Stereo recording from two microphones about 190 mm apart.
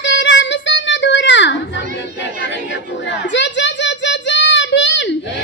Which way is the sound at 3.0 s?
70° left (ahead or behind).